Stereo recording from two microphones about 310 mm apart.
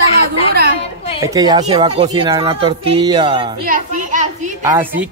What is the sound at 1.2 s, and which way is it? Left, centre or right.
A woman's voice, centre.